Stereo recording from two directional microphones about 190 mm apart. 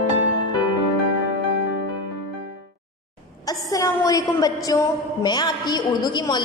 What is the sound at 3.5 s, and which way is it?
A woman's voice, 20° left (ahead or behind).